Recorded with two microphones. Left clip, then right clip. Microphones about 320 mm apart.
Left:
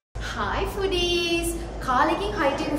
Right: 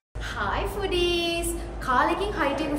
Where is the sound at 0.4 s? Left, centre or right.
Centre.